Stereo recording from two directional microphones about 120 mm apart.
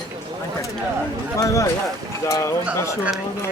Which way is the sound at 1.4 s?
25° left (ahead or behind).